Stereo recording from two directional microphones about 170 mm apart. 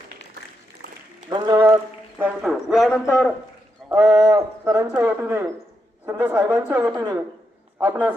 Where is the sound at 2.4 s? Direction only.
Centre (ahead or behind).